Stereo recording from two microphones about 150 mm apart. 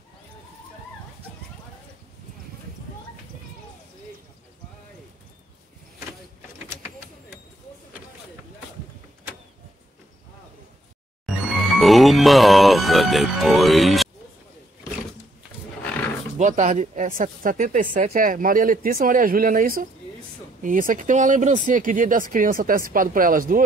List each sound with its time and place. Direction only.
11.2 s speech: centre (ahead or behind)
16.3 s speech: 55° right (ahead or behind)